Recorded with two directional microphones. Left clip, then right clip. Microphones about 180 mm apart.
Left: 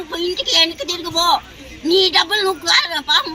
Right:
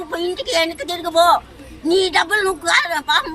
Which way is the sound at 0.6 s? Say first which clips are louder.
Left 2 dB; 10° right (ahead or behind).